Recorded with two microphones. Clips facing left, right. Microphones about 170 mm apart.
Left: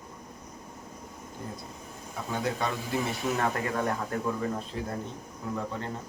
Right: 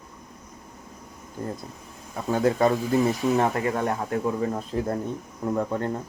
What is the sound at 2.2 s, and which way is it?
Speech, 45° right (ahead or behind).